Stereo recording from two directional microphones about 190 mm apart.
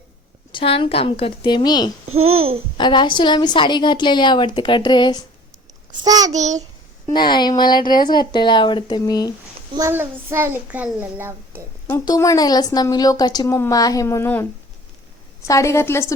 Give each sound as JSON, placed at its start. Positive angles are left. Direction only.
{"t": 0.5, "sound": "a woman's voice", "side_deg": 30}
{"t": 2.0, "sound": "speech", "side_deg": -90}
{"t": 2.7, "sound": "a woman's voice", "side_deg": 25}
{"t": 6.1, "sound": "a child's voice", "side_deg": -20}
{"t": 6.3, "sound": "child singing", "side_deg": -40}
{"t": 7.1, "sound": "a woman's voice", "side_deg": 25}
{"t": 9.7, "sound": "a child's voice", "side_deg": -15}
{"t": 11.9, "sound": "a woman's voice", "side_deg": 15}
{"t": 15.4, "sound": "a woman's voice", "side_deg": 15}